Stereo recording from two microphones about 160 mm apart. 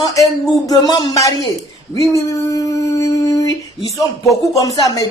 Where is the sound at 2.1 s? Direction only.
20° left (ahead or behind).